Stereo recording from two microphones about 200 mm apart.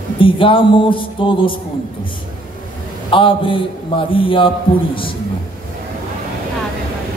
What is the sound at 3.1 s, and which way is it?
A man's voice, 25° left (ahead or behind).